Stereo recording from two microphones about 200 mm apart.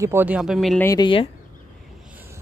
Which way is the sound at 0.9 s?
20° left (ahead or behind).